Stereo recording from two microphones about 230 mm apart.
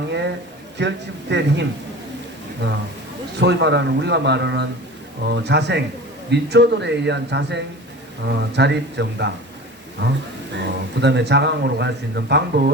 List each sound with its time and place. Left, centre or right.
0.1 s a sound: right
0.8 s a man's voice: right
3.4 s a man's voice: right